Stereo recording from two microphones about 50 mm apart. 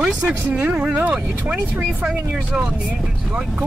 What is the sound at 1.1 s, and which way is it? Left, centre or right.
Speech, centre.